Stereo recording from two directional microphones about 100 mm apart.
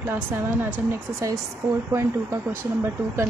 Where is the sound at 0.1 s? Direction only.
20° right (ahead or behind).